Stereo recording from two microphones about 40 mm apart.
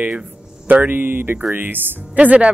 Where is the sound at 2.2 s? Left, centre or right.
Right.